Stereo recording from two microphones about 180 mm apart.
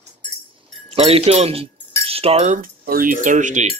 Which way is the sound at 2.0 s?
35° right (ahead or behind).